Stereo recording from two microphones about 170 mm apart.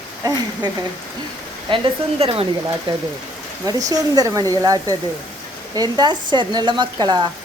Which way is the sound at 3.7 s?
20° right (ahead or behind).